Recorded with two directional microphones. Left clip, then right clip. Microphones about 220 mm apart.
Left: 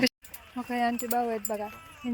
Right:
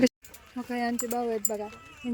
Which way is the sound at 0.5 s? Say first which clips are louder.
Left 2 dB; 10° left (ahead or behind).